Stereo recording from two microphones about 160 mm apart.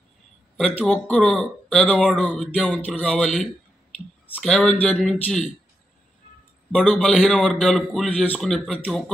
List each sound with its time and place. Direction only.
0.6 s a man's voice: 5° left (ahead or behind)
6.7 s a man's voice: 5° left (ahead or behind)